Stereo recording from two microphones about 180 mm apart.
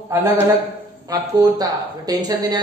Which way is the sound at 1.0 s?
20° right (ahead or behind).